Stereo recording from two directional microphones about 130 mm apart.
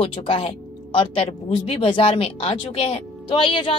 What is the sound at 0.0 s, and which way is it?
Speech, 45° left (ahead or behind).